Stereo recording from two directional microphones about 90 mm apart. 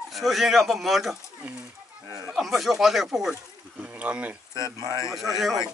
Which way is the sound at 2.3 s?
Centre (ahead or behind).